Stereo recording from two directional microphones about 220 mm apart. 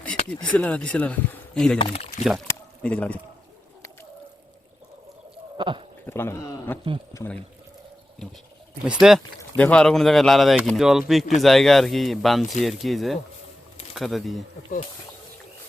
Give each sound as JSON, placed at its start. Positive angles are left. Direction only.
{"t": 0.0, "sound": "a sound", "side_deg": 5}
{"t": 0.4, "sound": "speech", "side_deg": 5}
{"t": 1.8, "sound": "speech", "side_deg": 25}
{"t": 2.5, "sound": "a sound", "side_deg": 5}
{"t": 5.5, "sound": "speech", "side_deg": -20}
{"t": 6.1, "sound": "a man's voice", "side_deg": 10}
{"t": 8.8, "sound": "speech", "side_deg": -5}